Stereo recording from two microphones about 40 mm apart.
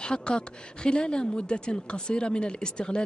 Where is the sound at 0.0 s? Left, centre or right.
Left.